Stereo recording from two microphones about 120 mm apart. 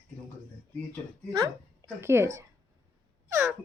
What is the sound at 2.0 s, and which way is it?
Speech, 20° right (ahead or behind).